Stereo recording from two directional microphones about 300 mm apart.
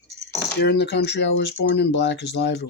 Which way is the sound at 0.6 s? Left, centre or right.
Left.